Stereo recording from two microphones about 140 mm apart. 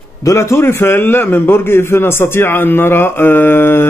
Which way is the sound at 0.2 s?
20° left (ahead or behind).